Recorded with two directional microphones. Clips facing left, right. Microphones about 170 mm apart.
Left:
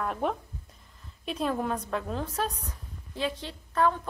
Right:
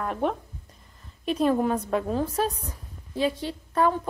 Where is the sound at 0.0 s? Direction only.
Centre (ahead or behind).